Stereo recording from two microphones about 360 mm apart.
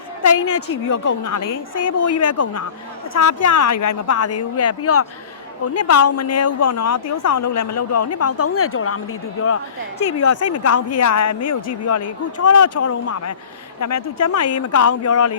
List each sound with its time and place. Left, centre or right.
0.2 s speech: left
1.0 s a woman's voice: left
10.0 s speech: left